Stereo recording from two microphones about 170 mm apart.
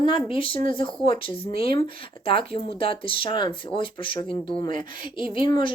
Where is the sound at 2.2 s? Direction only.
30° left (ahead or behind).